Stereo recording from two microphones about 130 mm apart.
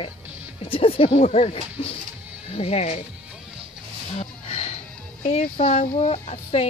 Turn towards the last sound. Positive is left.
turn(degrees=50)  # may be behind; listen again after turning